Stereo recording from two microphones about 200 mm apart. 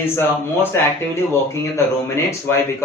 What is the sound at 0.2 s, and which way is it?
Speech, 10° left (ahead or behind).